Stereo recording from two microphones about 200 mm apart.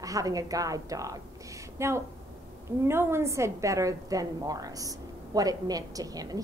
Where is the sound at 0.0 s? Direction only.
15° right (ahead or behind).